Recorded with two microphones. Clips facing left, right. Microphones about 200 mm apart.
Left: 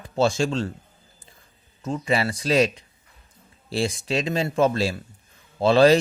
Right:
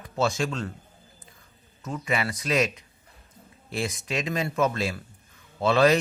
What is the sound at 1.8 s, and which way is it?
Speech, 30° left (ahead or behind).